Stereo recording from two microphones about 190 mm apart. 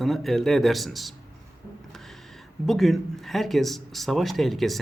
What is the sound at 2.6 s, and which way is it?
Speech, centre (ahead or behind).